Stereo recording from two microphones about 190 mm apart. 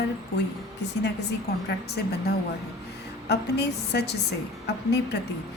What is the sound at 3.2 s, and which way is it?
Speech, 60° left (ahead or behind).